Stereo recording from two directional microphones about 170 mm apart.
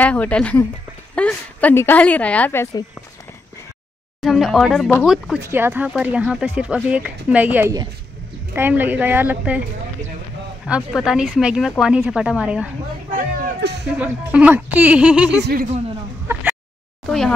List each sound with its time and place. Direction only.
0.0 s speech: 10° left (ahead or behind)
4.2 s speech: centre (ahead or behind)
5.4 s speech: 15° right (ahead or behind)
10.9 s speech: 5° right (ahead or behind)
13.1 s speech: 60° right (ahead or behind)
13.8 s speech: 10° right (ahead or behind)
15.4 s a man's voice: 60° right (ahead or behind)
16.3 s speech: 15° right (ahead or behind)
17.0 s speech: centre (ahead or behind)